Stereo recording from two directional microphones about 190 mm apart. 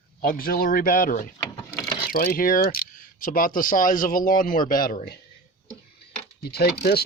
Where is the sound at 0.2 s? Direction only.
50° left (ahead or behind).